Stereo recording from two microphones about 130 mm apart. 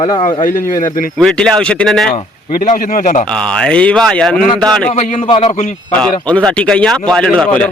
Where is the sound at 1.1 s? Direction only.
5° left (ahead or behind).